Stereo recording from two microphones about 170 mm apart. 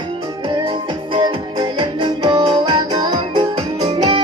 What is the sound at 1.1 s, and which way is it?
Music, 25° right (ahead or behind).